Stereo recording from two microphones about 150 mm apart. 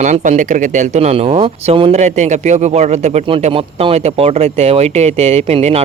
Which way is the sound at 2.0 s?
50° right (ahead or behind).